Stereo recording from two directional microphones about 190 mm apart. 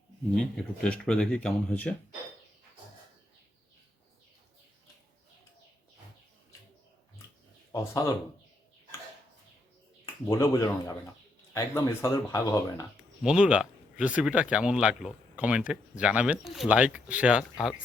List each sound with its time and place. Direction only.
0.3 s speech: 5° left (ahead or behind)
7.7 s speech: 20° left (ahead or behind)
10.2 s speech: 15° left (ahead or behind)
13.2 s speech: 5° right (ahead or behind)